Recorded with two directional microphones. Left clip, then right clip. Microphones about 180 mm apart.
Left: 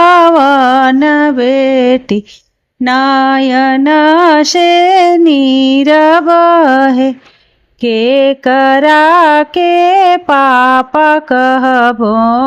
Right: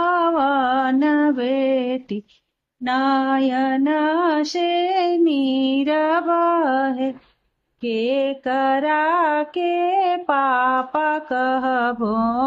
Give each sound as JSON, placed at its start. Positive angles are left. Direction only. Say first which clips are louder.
{"t": 0.0, "sound": "mantra", "louder": "left 13 dB", "side_deg": 55}
{"t": 2.8, "sound": "female singing", "louder": "left 11 dB", "side_deg": 55}
{"t": 7.8, "sound": "music", "louder": "left 12 dB", "side_deg": 40}